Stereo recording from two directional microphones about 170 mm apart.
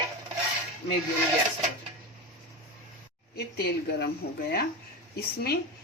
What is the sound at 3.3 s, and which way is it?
A woman's voice, 70° left (ahead or behind).